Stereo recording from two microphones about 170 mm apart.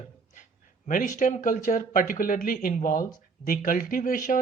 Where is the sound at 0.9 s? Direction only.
50° left (ahead or behind).